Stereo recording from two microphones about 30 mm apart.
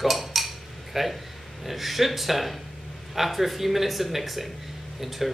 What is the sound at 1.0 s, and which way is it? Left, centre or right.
Speech, centre.